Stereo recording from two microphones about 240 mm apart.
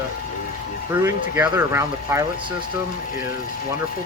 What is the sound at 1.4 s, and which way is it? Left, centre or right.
Speech, centre.